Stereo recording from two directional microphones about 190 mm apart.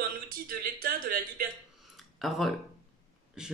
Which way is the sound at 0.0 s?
50° right (ahead or behind).